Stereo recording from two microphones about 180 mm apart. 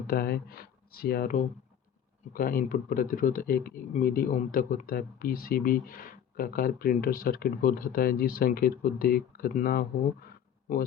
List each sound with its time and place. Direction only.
0.1 s speech: 55° left (ahead or behind)